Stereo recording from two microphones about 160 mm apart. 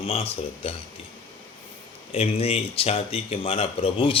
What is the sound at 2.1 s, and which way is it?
A man's voice, 40° left (ahead or behind).